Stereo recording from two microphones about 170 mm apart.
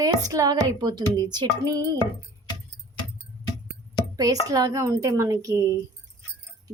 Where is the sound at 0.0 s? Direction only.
20° right (ahead or behind).